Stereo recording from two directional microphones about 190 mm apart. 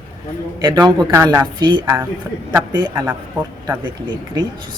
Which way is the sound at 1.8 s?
10° right (ahead or behind).